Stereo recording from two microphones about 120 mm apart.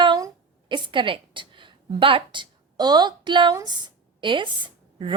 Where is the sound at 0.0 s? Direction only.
40° right (ahead or behind).